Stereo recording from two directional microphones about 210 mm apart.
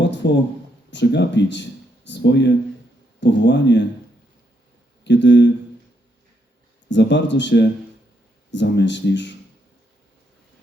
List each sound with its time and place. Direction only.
0.0 s a sound: 55° left (ahead or behind)
0.9 s speech: 55° left (ahead or behind)
5.0 s speech: 55° left (ahead or behind)
6.9 s speech: 55° left (ahead or behind)